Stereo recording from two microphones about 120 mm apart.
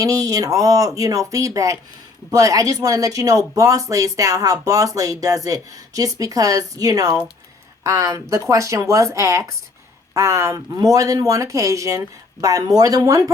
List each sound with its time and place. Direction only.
0.0 s speech: 30° right (ahead or behind)